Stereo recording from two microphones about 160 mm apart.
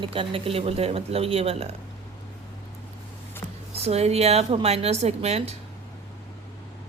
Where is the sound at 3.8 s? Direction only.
40° right (ahead or behind).